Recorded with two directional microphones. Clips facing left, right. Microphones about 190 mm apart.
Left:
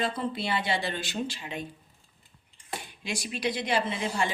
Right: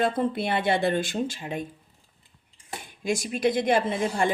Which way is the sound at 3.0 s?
45° right (ahead or behind).